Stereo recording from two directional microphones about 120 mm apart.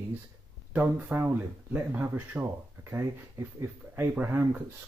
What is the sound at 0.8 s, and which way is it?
Speech, 15° right (ahead or behind).